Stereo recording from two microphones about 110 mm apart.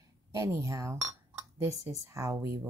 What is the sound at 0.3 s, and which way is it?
Speech, 30° right (ahead or behind).